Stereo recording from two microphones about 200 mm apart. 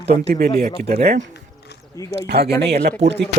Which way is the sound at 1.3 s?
55° left (ahead or behind).